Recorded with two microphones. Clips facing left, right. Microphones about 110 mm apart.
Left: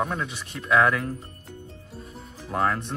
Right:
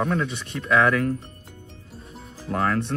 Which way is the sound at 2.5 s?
15° left (ahead or behind).